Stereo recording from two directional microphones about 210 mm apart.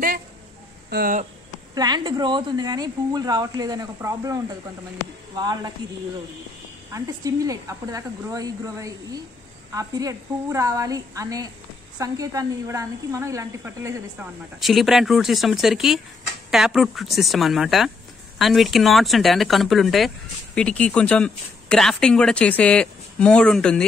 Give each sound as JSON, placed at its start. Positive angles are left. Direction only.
{"t": 0.8, "sound": "speech", "side_deg": -45}
{"t": 1.8, "sound": "speech", "side_deg": -20}
{"t": 5.4, "sound": "speech", "side_deg": -20}
{"t": 6.9, "sound": "speech", "side_deg": -15}
{"t": 14.6, "sound": "speech", "side_deg": 0}